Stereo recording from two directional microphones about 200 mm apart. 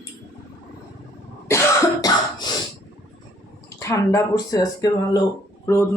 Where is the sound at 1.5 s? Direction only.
15° left (ahead or behind).